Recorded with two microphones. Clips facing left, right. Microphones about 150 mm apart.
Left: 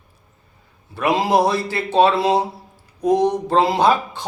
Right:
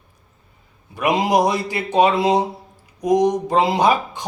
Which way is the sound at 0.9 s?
15° right (ahead or behind).